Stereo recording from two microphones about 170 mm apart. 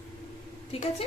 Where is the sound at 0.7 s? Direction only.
35° left (ahead or behind).